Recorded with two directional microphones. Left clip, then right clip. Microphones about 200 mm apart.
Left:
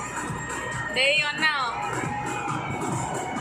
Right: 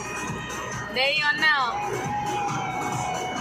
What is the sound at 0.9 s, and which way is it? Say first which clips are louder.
Speech: even; 30° right (ahead or behind).